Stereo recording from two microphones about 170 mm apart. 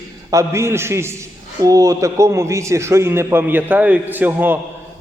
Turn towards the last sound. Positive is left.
turn(degrees=-10)  # may be behind; listen again after turning